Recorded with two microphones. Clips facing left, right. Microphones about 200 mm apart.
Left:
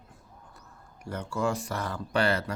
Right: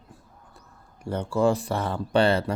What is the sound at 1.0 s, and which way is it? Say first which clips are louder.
Speech: right 7 dB; 30° right (ahead or behind).